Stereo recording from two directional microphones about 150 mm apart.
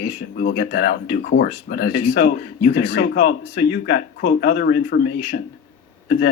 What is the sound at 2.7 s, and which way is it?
Speech, 90° left.